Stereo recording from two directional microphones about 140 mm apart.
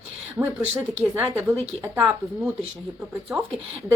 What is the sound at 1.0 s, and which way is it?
A woman's voice, 15° right (ahead or behind).